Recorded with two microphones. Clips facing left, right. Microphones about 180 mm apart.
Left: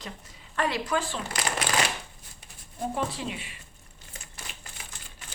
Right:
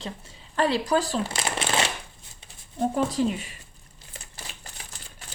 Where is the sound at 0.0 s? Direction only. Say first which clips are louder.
Right 5 dB; 30° right (ahead or behind).